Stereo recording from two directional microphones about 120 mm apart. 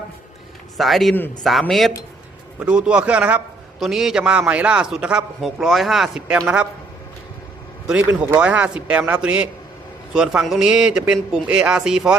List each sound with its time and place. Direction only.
0.8 s a man's voice: centre (ahead or behind)
1.1 s a man's voice: 15° left (ahead or behind)
1.5 s a man's voice: centre (ahead or behind)
7.9 s a man's voice: 10° right (ahead or behind)